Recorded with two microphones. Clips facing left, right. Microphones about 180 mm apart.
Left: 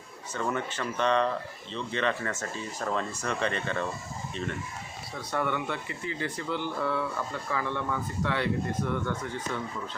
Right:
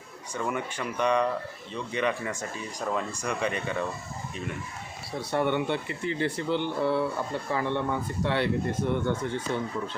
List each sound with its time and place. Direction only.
0.3 s speech: 10° right (ahead or behind)
5.1 s a man's voice: 30° right (ahead or behind)